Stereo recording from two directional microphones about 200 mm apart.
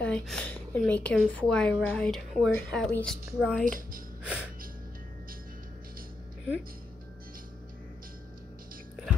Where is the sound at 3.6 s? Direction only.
40° right (ahead or behind).